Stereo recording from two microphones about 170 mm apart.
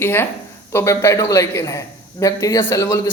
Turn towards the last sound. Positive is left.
turn(degrees=15)  # may be behind; listen again after turning